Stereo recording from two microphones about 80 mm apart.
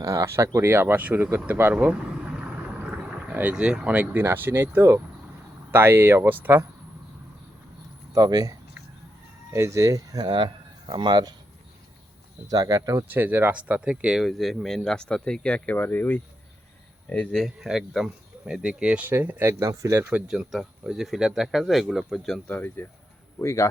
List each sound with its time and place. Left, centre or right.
0.0 s speech: right
8.1 s speech: right
9.5 s speech: right
10.2 s speech: right
12.5 s speech: right
13.1 s speech: right; by 16.2 s left
17.3 s speech: centre
19.0 s speech: right
19.5 s speech: right
20.1 s speech: centre
22.4 s speech: left
23.4 s speech: left